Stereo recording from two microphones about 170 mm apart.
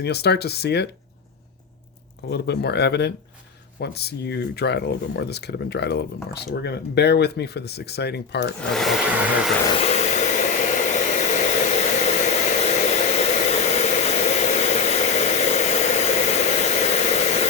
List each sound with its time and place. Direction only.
0.0 s speech: 75° left (ahead or behind)
2.3 s speech: 75° left (ahead or behind)
8.7 s hair dryer: centre (ahead or behind)
9.7 s a sound: 40° left (ahead or behind)